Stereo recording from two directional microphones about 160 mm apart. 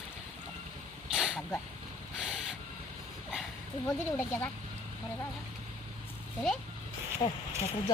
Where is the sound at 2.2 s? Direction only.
5° right (ahead or behind).